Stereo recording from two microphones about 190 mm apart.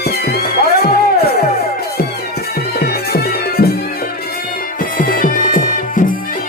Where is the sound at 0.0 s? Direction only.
55° left (ahead or behind).